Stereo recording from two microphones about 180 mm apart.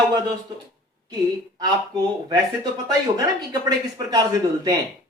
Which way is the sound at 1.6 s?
20° right (ahead or behind).